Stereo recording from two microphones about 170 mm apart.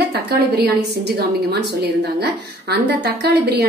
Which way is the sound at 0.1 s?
75° right (ahead or behind).